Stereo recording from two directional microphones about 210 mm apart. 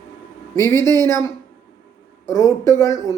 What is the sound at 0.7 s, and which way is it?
Speech, 20° right (ahead or behind).